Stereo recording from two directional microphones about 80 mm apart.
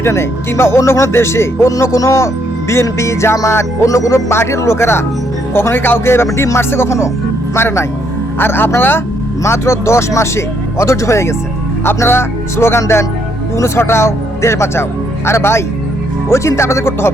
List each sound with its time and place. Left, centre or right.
0.0 s a man's voice: left